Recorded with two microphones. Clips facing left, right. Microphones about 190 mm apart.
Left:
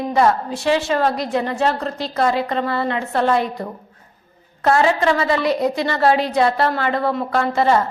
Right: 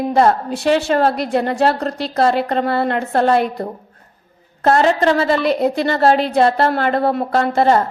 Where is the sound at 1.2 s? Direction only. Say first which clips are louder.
Right 3 dB; 65° right (ahead or behind).